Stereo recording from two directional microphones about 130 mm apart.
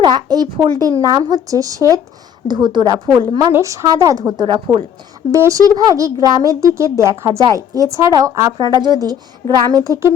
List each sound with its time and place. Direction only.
0.0 s a woman's voice: 35° right (ahead or behind)
3.5 s a child's voice: 20° right (ahead or behind); by 4.9 s 40° right (ahead or behind)
5.3 s a child's voice: 25° right (ahead or behind)
8.5 s a woman's voice: 35° right (ahead or behind)